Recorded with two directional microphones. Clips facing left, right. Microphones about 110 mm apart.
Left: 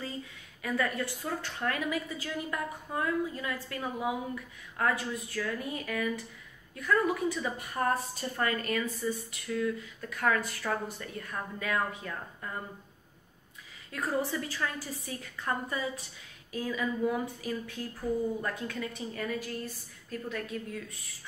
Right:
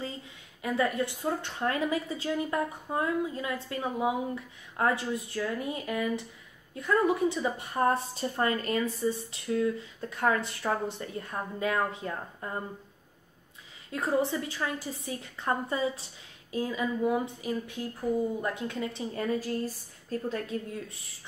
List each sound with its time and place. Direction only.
0.6 s a woman's voice: 20° right (ahead or behind)
13.9 s a woman's voice: 25° right (ahead or behind)